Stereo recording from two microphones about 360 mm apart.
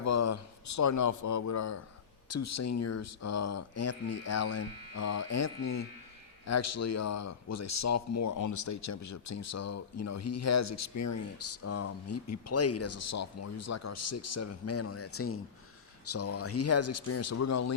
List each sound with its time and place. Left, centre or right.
0.0 s speech: left